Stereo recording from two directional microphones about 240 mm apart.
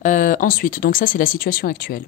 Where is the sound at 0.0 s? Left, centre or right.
Left.